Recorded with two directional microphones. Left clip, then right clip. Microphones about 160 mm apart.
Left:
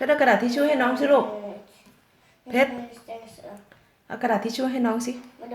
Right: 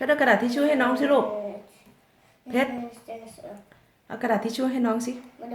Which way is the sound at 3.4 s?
50° right (ahead or behind).